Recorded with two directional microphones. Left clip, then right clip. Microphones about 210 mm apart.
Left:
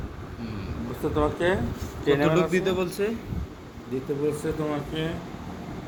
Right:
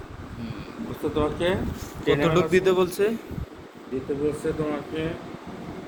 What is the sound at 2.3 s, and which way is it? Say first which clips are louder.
Speech: right 3 dB; 45° right (ahead or behind).